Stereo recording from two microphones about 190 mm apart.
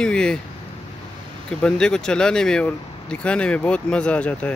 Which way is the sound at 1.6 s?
5° left (ahead or behind).